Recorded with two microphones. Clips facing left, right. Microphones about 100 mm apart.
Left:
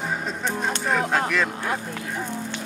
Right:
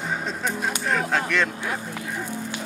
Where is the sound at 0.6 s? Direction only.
Centre (ahead or behind).